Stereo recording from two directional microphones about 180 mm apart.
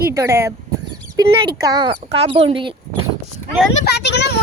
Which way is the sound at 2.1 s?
35° right (ahead or behind).